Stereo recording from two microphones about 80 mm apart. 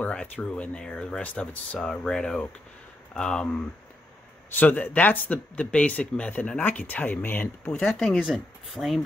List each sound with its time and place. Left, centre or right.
0.0 s speech: centre
4.6 s speech: left
7.7 s speech: centre